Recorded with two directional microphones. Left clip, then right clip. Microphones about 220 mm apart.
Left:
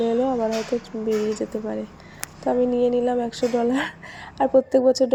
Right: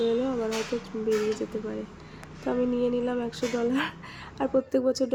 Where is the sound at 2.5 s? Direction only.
15° left (ahead or behind).